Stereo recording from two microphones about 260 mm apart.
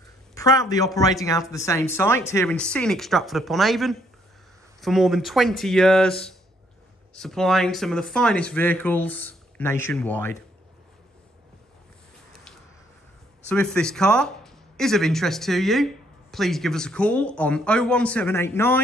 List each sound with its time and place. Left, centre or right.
0.3 s a man's voice: centre
13.5 s speech: centre